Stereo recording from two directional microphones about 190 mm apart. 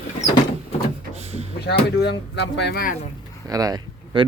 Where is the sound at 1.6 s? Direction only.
60° left (ahead or behind).